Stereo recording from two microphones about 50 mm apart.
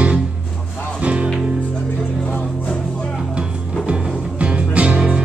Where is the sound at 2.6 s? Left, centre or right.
Centre.